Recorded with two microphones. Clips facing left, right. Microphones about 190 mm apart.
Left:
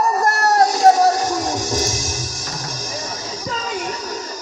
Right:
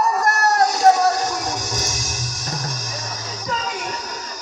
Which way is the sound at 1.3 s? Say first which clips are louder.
Left 5 dB; 30° left (ahead or behind).